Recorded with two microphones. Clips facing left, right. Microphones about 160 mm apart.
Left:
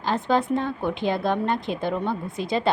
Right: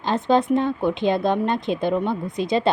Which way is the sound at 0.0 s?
20° right (ahead or behind).